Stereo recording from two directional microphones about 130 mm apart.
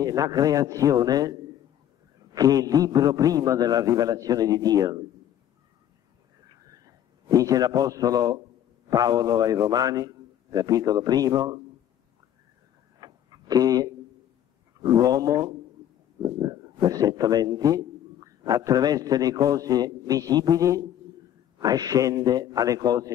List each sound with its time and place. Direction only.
0.0 s a man's voice: 30° right (ahead or behind)
2.3 s a man's voice: 30° right (ahead or behind)
7.2 s a man's voice: 30° right (ahead or behind)
13.0 s a sound: 30° right (ahead or behind)
14.8 s a man's voice: 30° right (ahead or behind)